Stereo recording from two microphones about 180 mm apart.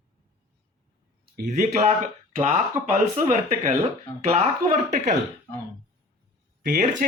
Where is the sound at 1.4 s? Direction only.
40° right (ahead or behind).